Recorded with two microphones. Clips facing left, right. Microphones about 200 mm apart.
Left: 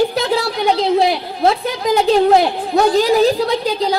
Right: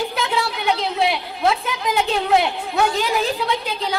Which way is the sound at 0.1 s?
35° left (ahead or behind).